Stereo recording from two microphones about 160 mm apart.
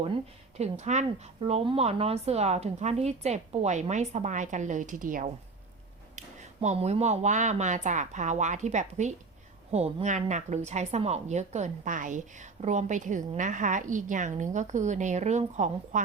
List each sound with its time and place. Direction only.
0.5 s a woman's voice: 45° right (ahead or behind)
6.1 s a woman's voice: 45° right (ahead or behind)